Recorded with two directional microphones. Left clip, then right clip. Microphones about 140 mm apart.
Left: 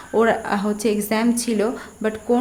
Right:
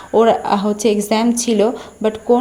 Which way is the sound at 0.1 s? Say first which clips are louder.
Right 6 dB; 15° right (ahead or behind).